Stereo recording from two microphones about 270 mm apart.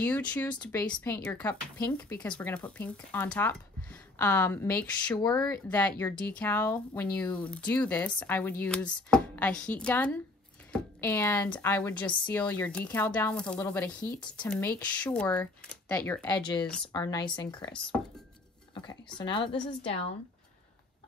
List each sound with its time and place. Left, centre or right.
0.0 s speech: centre
16.3 s a woman's voice: centre
19.1 s a woman's voice: centre